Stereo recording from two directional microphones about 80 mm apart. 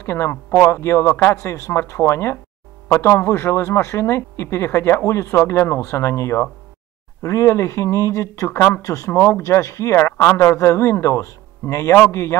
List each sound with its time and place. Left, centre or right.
0.0 s speech: left
8.5 s speech: left
8.8 s speech: left